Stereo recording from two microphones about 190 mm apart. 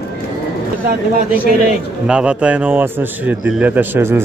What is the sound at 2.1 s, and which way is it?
A man's voice, 5° right (ahead or behind).